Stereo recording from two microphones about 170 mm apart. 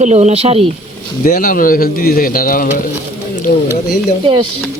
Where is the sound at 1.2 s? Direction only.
55° left (ahead or behind).